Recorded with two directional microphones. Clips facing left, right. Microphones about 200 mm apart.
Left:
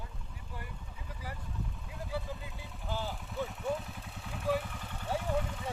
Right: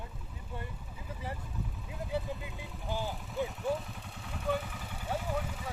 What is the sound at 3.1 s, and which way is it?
Vehicle, centre (ahead or behind).